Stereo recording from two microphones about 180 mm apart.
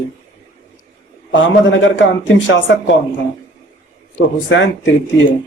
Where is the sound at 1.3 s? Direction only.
90° left.